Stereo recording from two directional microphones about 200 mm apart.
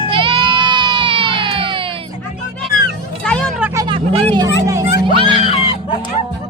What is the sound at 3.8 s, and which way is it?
Vehicle, 25° right (ahead or behind).